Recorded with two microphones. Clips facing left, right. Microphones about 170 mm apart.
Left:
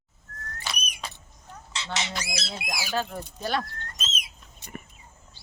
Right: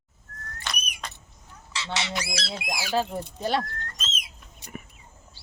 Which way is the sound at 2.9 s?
25° right (ahead or behind).